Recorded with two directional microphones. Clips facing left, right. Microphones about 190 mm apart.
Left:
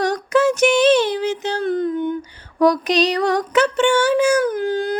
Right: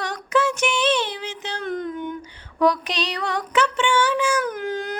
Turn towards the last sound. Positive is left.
turn(degrees=30)  # may be behind; listen again after turning